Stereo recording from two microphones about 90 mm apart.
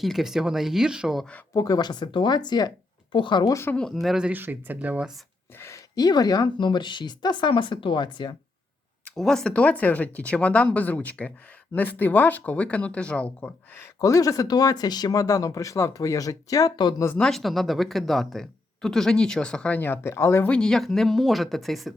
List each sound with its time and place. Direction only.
0.0 s speech: centre (ahead or behind)
1.5 s speech: 45° left (ahead or behind); by 3.4 s 65° left (ahead or behind)
3.4 s speech: 35° left (ahead or behind)
4.0 s speech: 5° right (ahead or behind)
4.3 s speech: 20° right (ahead or behind)
5.5 s speech: 30° left (ahead or behind)
6.0 s speech: 45° left (ahead or behind)
9.1 s speech: 5° left (ahead or behind)
14.0 s speech: 40° left (ahead or behind)
17.2 s speech: 5° left (ahead or behind); by 20.5 s 30° left (ahead or behind)
20.5 s speech: 10° left (ahead or behind)